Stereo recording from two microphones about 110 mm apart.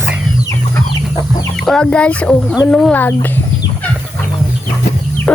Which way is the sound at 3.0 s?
20° left (ahead or behind).